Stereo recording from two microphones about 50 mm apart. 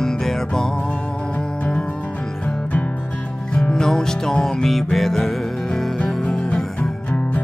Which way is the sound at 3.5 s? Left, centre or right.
Centre.